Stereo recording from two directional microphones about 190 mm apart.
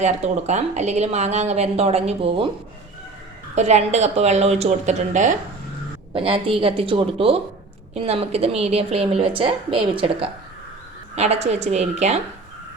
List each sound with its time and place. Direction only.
0.0 s speech: 35° right (ahead or behind)
3.5 s speech: 35° right (ahead or behind)
6.1 s a woman's voice: 30° right (ahead or behind)